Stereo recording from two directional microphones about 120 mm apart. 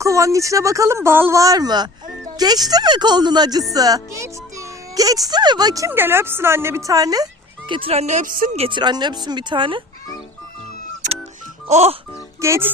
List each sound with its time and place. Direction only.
0.0 s speech: 25° right (ahead or behind)
7.7 s speech: 50° right (ahead or behind)
8.0 s speech: 85° right
8.6 s speech: 40° right (ahead or behind)
11.7 s speech: 60° right (ahead or behind)
12.4 s speech: 20° right (ahead or behind)